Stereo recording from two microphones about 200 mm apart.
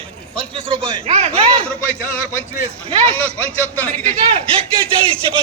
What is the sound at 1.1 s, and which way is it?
Speech, 30° right (ahead or behind).